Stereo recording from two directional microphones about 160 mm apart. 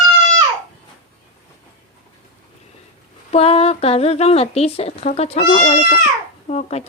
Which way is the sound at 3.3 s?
35° left (ahead or behind).